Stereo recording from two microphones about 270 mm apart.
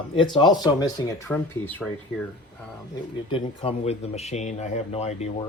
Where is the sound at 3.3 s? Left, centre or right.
Left.